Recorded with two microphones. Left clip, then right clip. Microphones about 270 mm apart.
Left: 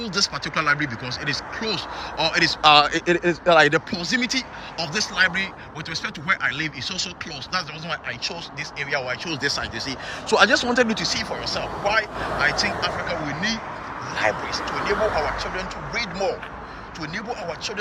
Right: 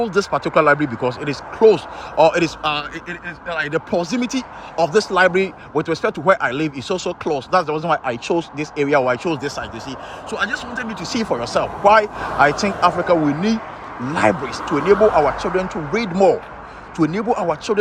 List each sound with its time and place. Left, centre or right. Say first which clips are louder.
0.0 s speech: right 6 dB; centre
3.7 s speech: right 2 dB; centre
10.2 s a man's voice: left 6 dB; centre
11.0 s speech: right 4 dB; centre